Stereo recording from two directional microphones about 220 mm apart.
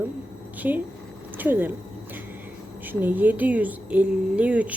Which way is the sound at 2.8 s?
10° right (ahead or behind).